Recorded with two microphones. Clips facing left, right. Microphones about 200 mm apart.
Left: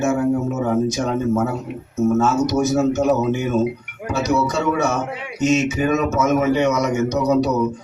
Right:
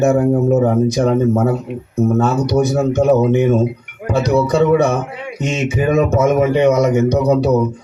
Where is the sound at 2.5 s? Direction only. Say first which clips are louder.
Right 3 dB; 35° right (ahead or behind).